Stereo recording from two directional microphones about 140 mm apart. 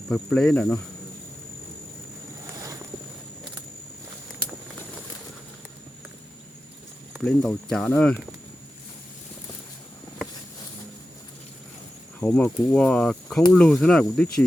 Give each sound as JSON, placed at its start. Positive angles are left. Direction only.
{"t": 0.1, "sound": "speech", "side_deg": 5}
{"t": 2.5, "sound": "a sound", "side_deg": -25}
{"t": 7.3, "sound": "speech", "side_deg": 5}
{"t": 12.2, "sound": "speech", "side_deg": 5}